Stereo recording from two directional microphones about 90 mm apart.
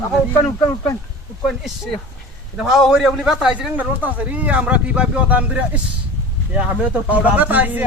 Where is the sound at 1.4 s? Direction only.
Centre (ahead or behind).